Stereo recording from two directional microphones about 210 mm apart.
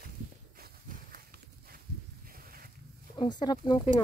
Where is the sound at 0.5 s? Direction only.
45° right (ahead or behind).